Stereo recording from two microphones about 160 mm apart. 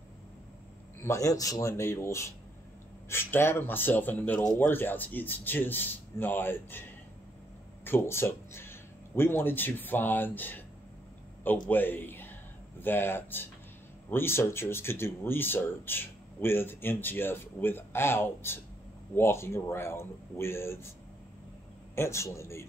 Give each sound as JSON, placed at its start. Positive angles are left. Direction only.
{"t": 1.0, "sound": "speech", "side_deg": 20}
{"t": 11.7, "sound": "a man's voice", "side_deg": 10}
{"t": 21.9, "sound": "speech", "side_deg": 15}